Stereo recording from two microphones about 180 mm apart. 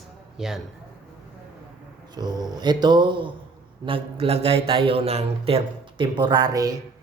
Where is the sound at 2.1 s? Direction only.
20° right (ahead or behind).